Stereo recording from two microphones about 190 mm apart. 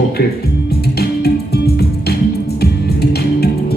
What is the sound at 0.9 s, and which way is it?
Music, 55° left (ahead or behind).